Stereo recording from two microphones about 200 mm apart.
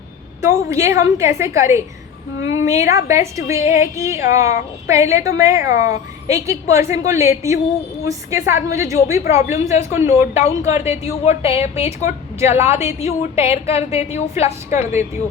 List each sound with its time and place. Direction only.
0.4 s a woman's voice: 15° right (ahead or behind)
11.0 s a woman's voice: 30° left (ahead or behind)
12.0 s a woman's voice: 15° right (ahead or behind)
12.6 s a woman's voice: 30° left (ahead or behind)